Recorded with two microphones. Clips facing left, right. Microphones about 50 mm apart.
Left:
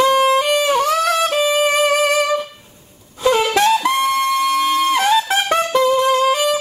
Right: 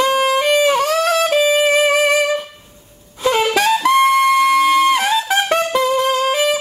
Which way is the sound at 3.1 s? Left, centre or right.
Centre.